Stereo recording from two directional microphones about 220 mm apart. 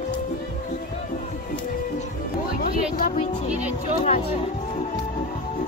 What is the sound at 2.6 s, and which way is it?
Music, 40° left (ahead or behind).